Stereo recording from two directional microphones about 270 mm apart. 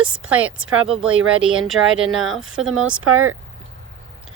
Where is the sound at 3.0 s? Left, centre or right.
Right.